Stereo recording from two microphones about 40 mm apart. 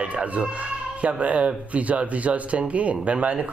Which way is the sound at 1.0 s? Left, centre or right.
Right.